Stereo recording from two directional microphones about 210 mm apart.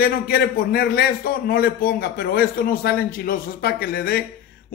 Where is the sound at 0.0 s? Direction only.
50° left (ahead or behind).